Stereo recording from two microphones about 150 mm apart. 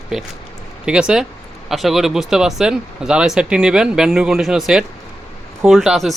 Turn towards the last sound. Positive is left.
turn(degrees=0)  # may be behind; listen again after turning